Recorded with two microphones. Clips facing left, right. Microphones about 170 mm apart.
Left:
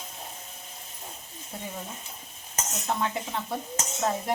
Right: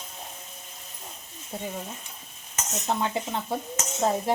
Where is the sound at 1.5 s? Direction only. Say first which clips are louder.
Right 4 dB; 25° right (ahead or behind).